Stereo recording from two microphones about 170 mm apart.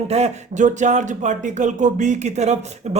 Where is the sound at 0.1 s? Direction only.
40° right (ahead or behind).